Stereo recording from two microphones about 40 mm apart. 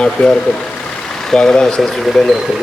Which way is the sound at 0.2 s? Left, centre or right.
Left.